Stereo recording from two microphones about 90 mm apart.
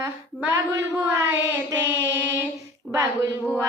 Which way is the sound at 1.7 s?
35° right (ahead or behind).